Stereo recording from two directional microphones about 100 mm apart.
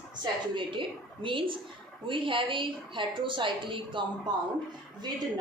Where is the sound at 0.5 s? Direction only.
55° right (ahead or behind).